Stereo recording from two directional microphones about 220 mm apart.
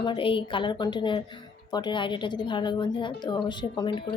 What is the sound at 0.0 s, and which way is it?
Speech, 20° left (ahead or behind).